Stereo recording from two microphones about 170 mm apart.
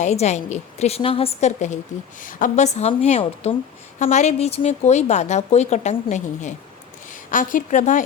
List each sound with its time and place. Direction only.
0.0 s a woman's voice: 40° left (ahead or behind)